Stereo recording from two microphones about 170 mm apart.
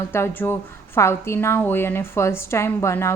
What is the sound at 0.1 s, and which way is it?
A woman's voice, 15° left (ahead or behind).